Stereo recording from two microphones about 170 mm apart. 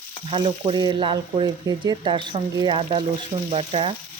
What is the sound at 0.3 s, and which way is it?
Frying, 30° right (ahead or behind).